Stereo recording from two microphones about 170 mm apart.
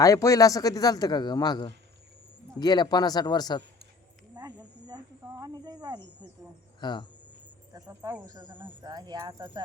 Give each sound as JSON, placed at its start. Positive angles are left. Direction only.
{"t": 0.0, "sound": "speech", "side_deg": 20}
{"t": 4.4, "sound": "speech", "side_deg": -25}
{"t": 6.7, "sound": "speech", "side_deg": 25}
{"t": 7.7, "sound": "speech", "side_deg": -20}